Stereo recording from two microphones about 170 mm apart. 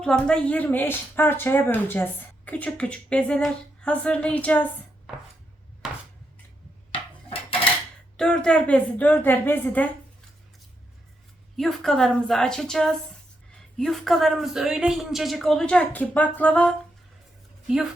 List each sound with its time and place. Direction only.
0.0 s speech: 5° left (ahead or behind)
6.9 s dishes: 30° left (ahead or behind)
8.1 s speech: 5° left (ahead or behind)
11.5 s a man's voice: centre (ahead or behind)